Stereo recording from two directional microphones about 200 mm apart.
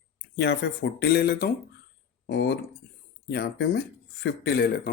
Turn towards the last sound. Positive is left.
turn(degrees=55)  # may be behind; listen again after turning